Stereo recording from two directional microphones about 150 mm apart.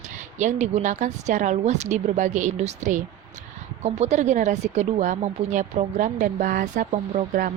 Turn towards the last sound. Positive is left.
turn(degrees=-50)  # may be behind; listen again after turning